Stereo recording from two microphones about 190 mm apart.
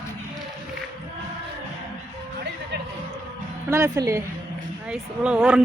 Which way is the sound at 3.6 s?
15° right (ahead or behind).